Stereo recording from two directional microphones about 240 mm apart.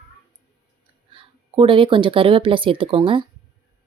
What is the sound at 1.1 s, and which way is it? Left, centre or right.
Speech, right.